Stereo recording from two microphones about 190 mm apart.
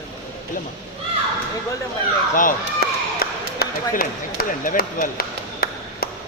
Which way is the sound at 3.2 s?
50° left (ahead or behind).